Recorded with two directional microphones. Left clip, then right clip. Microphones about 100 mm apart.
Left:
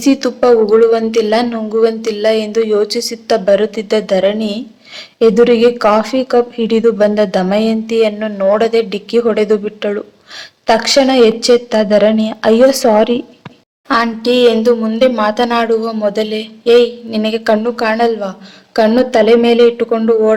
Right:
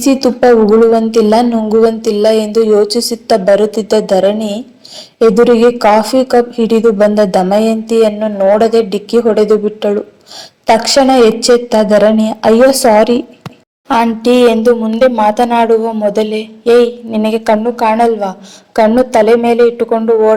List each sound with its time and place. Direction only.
0.0 s a woman's voice: 25° right (ahead or behind); by 20.3 s 10° right (ahead or behind)